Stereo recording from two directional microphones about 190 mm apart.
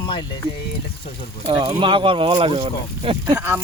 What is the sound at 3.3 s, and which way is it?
Speech, 10° right (ahead or behind).